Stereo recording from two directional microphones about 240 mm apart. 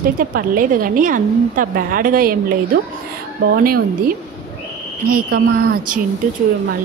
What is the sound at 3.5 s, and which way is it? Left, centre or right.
Speech, right.